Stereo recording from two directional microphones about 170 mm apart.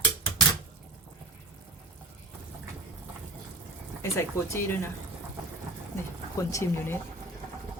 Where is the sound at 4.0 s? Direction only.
15° left (ahead or behind).